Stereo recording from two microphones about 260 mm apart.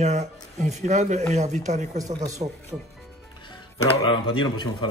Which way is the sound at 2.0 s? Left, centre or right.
Centre.